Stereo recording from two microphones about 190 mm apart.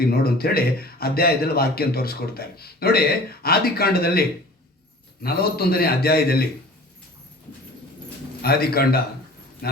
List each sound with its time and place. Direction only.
0.0 s a man's voice: 55° left (ahead or behind)
8.4 s a man's voice: 55° left (ahead or behind)